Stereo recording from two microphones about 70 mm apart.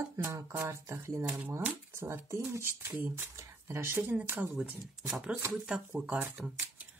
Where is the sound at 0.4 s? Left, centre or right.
Right.